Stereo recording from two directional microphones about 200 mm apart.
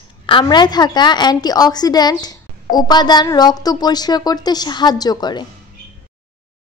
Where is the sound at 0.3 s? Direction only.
25° left (ahead or behind).